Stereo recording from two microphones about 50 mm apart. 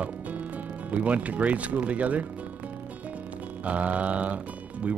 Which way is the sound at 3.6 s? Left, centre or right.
Right.